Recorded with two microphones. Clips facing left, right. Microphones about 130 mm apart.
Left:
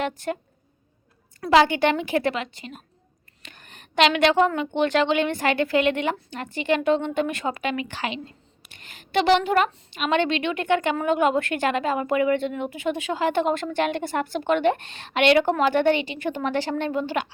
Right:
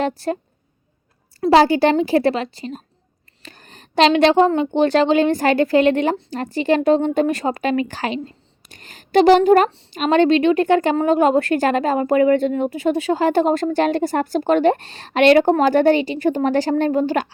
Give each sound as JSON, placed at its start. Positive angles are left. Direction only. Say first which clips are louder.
{"t": 0.0, "sound": "a woman's voice", "louder": "right 6 dB", "side_deg": -35}
{"t": 1.4, "sound": "a woman's voice", "louder": "right 5 dB", "side_deg": -35}